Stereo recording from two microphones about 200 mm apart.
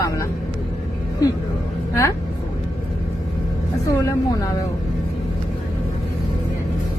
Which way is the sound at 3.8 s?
15° left (ahead or behind).